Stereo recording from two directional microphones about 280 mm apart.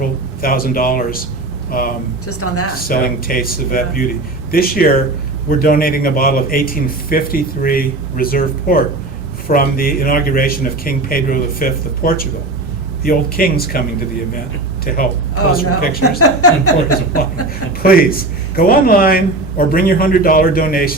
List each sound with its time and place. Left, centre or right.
0.4 s a man's voice: left
2.2 s speech: left
2.7 s a man's voice: left
14.9 s a man's voice: left
16.1 s speech: left
18.5 s a man's voice: left